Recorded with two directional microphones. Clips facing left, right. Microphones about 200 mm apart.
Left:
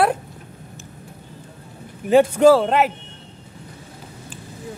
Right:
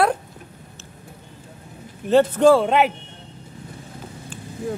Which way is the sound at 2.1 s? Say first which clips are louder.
Left 1 dB; 10° left (ahead or behind).